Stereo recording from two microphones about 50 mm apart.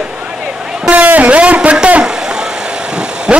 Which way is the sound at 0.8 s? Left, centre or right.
Right.